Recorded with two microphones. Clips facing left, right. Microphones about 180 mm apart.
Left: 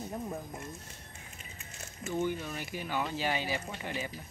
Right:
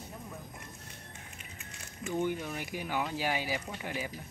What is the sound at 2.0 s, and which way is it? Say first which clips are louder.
Speech: even; 15° right (ahead or behind).